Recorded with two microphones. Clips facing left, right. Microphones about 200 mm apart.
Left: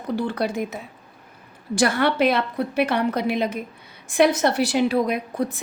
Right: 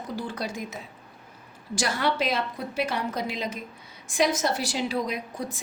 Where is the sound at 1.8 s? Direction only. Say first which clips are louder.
Left 7 dB; 60° left (ahead or behind).